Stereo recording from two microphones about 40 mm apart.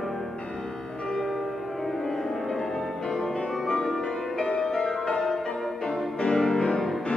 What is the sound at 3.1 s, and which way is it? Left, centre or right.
Music, centre.